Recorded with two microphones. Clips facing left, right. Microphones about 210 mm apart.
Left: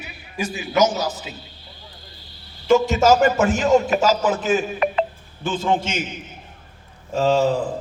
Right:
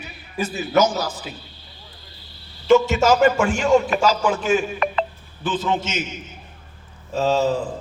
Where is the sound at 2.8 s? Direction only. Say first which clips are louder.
Even; 40° left (ahead or behind).